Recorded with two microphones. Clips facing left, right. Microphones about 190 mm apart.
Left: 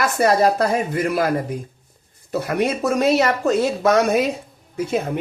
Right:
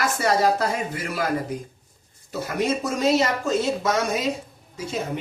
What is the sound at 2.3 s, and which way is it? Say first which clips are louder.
Speech: left 4 dB; 60° left (ahead or behind).